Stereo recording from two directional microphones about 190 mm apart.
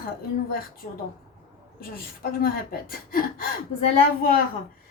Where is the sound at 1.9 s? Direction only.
50° left (ahead or behind).